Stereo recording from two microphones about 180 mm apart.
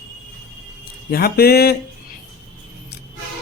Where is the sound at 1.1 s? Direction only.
60° left (ahead or behind).